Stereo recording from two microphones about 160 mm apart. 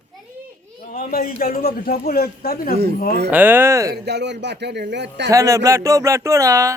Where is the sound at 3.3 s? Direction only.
10° right (ahead or behind).